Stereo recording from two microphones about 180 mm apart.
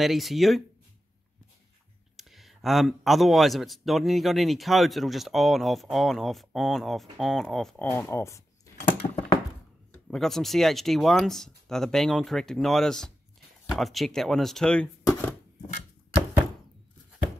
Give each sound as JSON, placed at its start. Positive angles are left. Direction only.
{"t": 0.0, "sound": "speech", "side_deg": 0}
{"t": 2.1, "sound": "speech", "side_deg": 0}
{"t": 9.0, "sound": "a sound", "side_deg": 25}
{"t": 10.0, "sound": "speech", "side_deg": 0}